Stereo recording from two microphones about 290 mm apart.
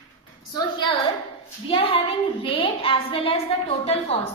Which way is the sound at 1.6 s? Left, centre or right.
Centre.